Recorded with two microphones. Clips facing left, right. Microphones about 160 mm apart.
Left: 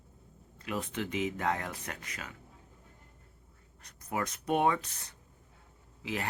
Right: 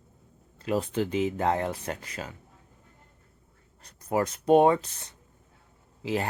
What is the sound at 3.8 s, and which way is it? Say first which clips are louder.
Speech: right 8 dB; 30° right (ahead or behind).